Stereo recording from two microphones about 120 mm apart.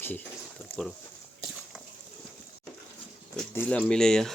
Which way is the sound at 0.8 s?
5° left (ahead or behind).